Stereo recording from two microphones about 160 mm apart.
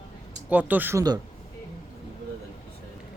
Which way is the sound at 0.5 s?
10° right (ahead or behind).